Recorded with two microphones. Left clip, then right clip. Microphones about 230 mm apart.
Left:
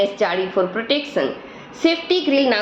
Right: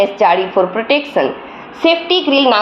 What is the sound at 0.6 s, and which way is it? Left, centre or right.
Speech, right.